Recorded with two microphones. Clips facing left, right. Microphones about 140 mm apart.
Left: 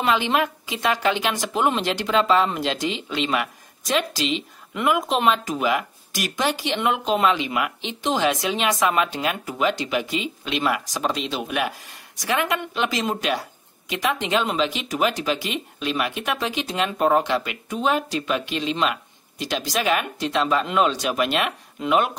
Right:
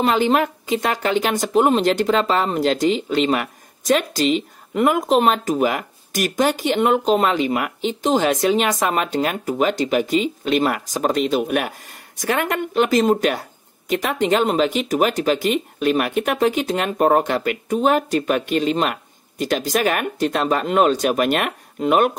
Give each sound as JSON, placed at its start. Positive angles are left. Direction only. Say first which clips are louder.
{"t": 0.0, "sound": "speech", "louder": "right 4 dB", "side_deg": -40}